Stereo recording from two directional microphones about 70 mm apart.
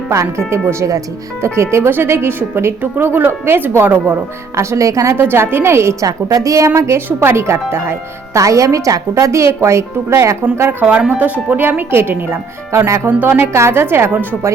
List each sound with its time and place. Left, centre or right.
0.1 s speech: right
4.6 s speech: right
5.1 s speech: right
6.1 s speech: right
6.7 s speech: right
10.6 s speech: right
13.1 s speech: right
13.5 s speech: right